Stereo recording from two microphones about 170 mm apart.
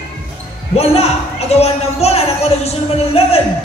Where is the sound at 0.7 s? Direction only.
35° left (ahead or behind).